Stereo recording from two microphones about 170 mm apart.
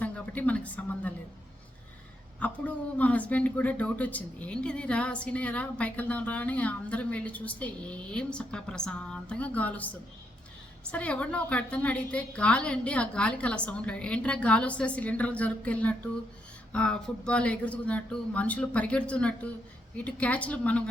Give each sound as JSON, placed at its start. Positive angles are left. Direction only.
{"t": 0.0, "sound": "speech", "side_deg": 10}
{"t": 2.4, "sound": "speech", "side_deg": 10}